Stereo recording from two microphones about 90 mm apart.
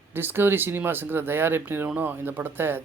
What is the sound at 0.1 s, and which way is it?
Speech, 20° right (ahead or behind).